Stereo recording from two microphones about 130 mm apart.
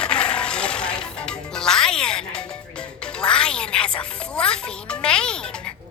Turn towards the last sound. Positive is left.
turn(degrees=5)  # may be behind; listen again after turning